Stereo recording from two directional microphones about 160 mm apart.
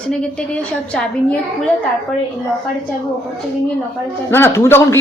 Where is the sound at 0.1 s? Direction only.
5° left (ahead or behind).